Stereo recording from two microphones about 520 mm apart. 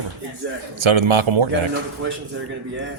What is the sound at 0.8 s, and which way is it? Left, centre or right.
Speech, right.